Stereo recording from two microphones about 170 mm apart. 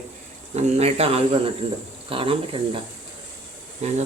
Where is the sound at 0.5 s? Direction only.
40° right (ahead or behind).